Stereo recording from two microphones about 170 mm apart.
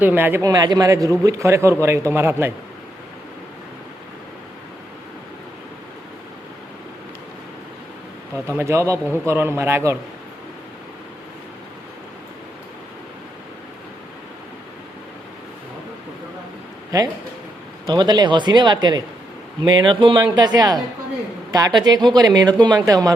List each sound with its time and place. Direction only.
0.0 s a man's voice: 10° right (ahead or behind)
8.4 s a man's voice: 15° right (ahead or behind)
16.9 s speech: 20° right (ahead or behind)